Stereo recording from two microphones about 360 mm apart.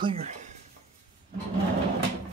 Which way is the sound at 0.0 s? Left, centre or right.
Centre.